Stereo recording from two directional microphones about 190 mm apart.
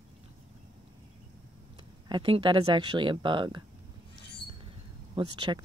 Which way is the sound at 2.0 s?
25° right (ahead or behind).